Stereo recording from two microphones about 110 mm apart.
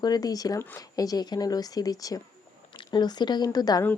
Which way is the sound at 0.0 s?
35° left (ahead or behind).